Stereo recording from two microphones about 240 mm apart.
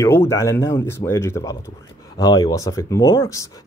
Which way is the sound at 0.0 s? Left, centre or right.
Centre.